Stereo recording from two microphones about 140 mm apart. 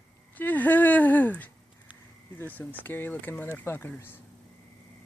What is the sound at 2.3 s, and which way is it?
Speech, 15° left (ahead or behind).